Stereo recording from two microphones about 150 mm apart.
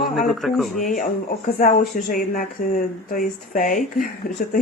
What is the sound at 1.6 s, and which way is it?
Speech, 65° left (ahead or behind).